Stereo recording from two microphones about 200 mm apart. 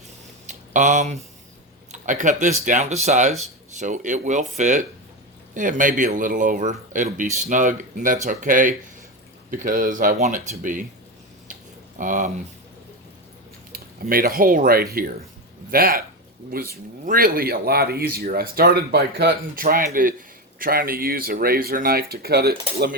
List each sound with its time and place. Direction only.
0.4 s a sound: 40° right (ahead or behind)
1.9 s speech: 40° right (ahead or behind)
11.9 s speech: 40° right (ahead or behind)
13.7 s speech: 45° right (ahead or behind)